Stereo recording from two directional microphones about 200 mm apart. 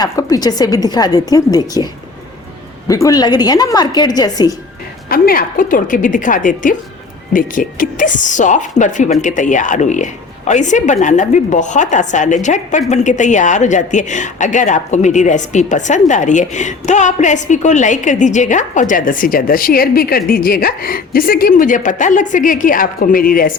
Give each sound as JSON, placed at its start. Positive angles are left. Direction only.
{"t": 0.0, "sound": "a woman's voice", "side_deg": 20}
{"t": 5.0, "sound": "a woman's voice", "side_deg": 45}